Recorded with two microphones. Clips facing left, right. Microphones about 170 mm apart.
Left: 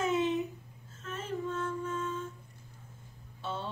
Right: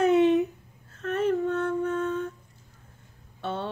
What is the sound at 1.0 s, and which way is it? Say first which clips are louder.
Female singing: right 11 dB; 65° right (ahead or behind).